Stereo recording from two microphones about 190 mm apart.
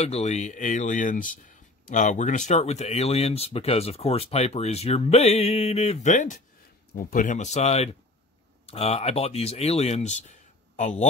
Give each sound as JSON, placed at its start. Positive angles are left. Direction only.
{"t": 0.0, "sound": "speech", "side_deg": 35}